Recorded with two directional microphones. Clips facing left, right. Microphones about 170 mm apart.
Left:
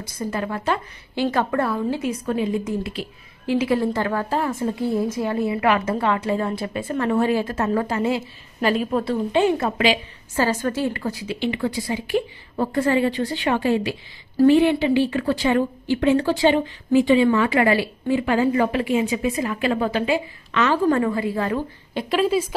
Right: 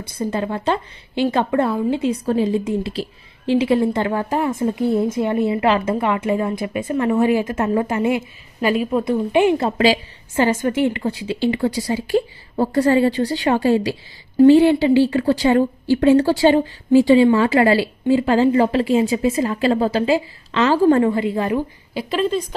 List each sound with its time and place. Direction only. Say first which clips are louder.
0.2 s a woman's voice: right 4 dB; 25° right (ahead or behind)
21.5 s a woman's voice: right 3 dB; centre (ahead or behind)